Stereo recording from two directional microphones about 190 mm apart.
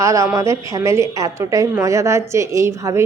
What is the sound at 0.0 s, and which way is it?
Speech, 15° right (ahead or behind).